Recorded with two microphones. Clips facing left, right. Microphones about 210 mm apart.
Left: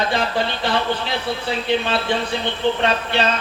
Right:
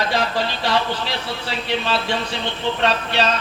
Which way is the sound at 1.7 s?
55° left (ahead or behind).